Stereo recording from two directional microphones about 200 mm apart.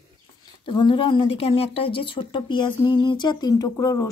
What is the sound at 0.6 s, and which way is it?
Speech, 25° left (ahead or behind).